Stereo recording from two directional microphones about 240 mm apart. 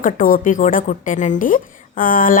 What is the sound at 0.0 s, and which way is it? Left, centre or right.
A woman's voice, left.